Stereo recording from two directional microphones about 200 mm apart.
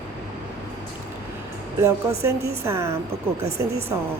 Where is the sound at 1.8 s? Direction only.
15° right (ahead or behind).